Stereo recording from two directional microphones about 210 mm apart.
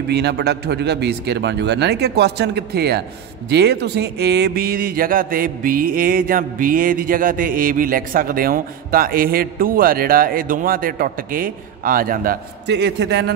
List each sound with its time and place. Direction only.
0.1 s speech: 50° right (ahead or behind)